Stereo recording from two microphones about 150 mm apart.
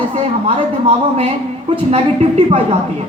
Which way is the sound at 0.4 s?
40° right (ahead or behind).